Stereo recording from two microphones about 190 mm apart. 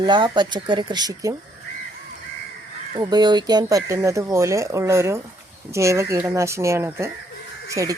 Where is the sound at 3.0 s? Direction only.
20° right (ahead or behind).